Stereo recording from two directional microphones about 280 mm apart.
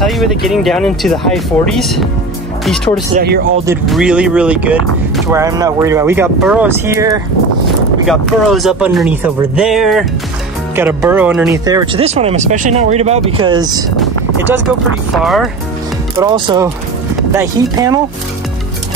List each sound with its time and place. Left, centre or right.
0.0 s speech: centre
3.2 s speech: right
3.9 s speech: centre
11.6 s speech: centre
13.9 s vehicle: centre
15.1 s speech: centre
16.2 s speech: centre